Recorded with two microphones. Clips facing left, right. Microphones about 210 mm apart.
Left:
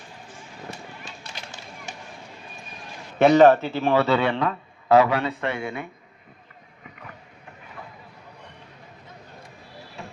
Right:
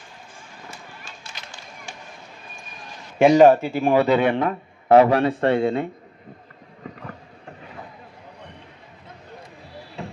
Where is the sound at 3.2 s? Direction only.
10° right (ahead or behind); by 5.8 s 30° right (ahead or behind).